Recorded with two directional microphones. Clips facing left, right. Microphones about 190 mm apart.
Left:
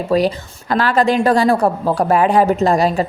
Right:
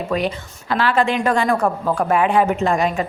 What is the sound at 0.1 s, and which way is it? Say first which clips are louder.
A woman's voice: left 8 dB; 35° left (ahead or behind).